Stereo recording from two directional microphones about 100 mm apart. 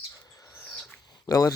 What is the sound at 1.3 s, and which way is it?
Speech, 40° left (ahead or behind).